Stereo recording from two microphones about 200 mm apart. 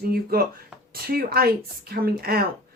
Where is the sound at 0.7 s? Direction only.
5° right (ahead or behind).